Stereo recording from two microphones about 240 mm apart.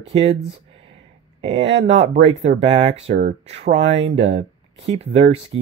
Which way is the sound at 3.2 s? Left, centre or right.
Right.